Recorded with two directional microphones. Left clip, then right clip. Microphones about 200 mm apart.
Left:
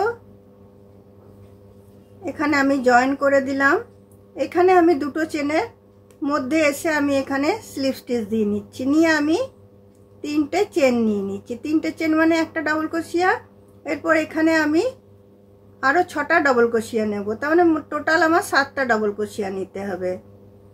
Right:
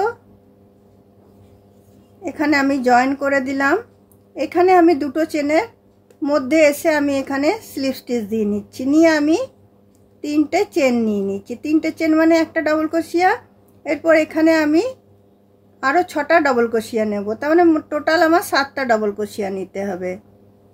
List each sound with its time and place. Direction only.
2.2 s speech: 30° right (ahead or behind)